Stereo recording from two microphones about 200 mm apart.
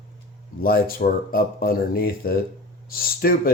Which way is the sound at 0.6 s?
50° left (ahead or behind).